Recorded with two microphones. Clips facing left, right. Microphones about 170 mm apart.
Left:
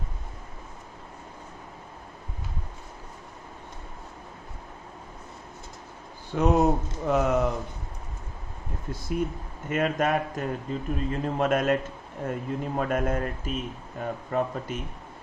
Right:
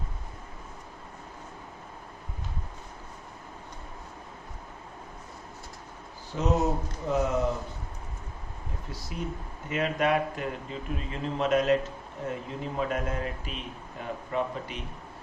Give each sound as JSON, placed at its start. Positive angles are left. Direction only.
{"t": 6.3, "sound": "speech", "side_deg": 55}
{"t": 8.9, "sound": "a man's voice", "side_deg": 50}